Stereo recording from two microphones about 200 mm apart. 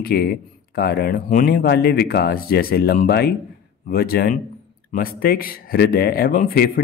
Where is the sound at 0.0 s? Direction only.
50° left (ahead or behind).